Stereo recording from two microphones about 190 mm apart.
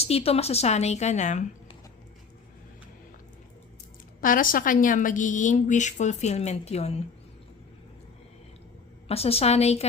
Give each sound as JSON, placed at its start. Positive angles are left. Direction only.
{"t": 0.0, "sound": "a woman's voice", "side_deg": 30}
{"t": 4.2, "sound": "a woman's voice", "side_deg": 45}
{"t": 9.0, "sound": "a woman's voice", "side_deg": 30}